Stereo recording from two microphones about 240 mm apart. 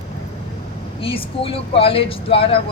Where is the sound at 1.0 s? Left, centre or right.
Left.